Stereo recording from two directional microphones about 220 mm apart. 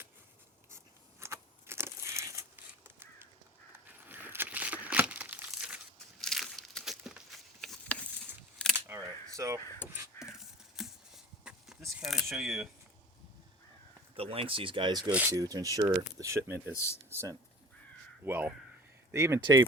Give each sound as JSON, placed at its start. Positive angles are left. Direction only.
{"t": 1.2, "sound": "a sound", "side_deg": -10}
{"t": 3.8, "sound": "crumpling", "side_deg": -10}
{"t": 8.7, "sound": "camera", "side_deg": -15}
{"t": 9.6, "sound": "speech", "side_deg": 10}
{"t": 9.9, "sound": "a sound", "side_deg": -10}
{"t": 14.2, "sound": "speech", "side_deg": -25}
{"t": 16.7, "sound": "speech", "side_deg": 10}
{"t": 17.1, "sound": "speech", "side_deg": -10}